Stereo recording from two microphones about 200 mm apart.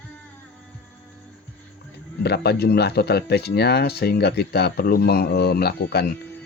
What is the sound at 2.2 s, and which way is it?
Speech, 55° left (ahead or behind).